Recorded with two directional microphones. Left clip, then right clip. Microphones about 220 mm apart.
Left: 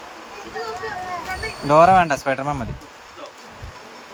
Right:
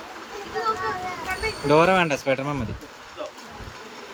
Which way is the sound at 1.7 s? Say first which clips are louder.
Left 5 dB; 5° left (ahead or behind).